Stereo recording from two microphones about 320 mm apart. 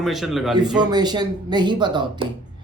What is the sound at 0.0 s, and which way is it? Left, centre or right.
Speech, centre.